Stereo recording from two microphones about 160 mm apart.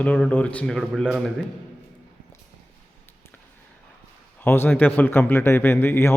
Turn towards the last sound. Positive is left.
turn(degrees=15)  # may be behind; listen again after turning